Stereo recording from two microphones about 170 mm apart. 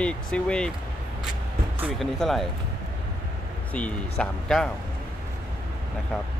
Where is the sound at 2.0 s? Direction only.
Centre (ahead or behind).